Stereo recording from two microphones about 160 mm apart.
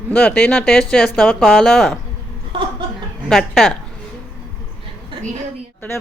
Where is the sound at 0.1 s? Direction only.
5° left (ahead or behind).